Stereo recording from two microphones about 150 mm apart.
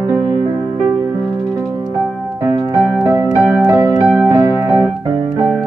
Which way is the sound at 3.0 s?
15° right (ahead or behind).